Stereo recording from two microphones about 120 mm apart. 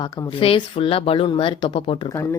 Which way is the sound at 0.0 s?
40° left (ahead or behind).